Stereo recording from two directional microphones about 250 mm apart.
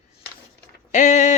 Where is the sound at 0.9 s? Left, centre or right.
Left.